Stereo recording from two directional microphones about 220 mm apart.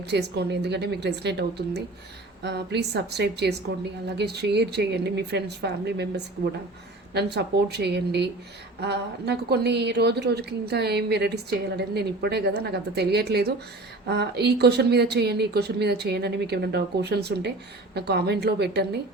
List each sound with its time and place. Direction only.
0.0 s a woman's voice: 50° right (ahead or behind)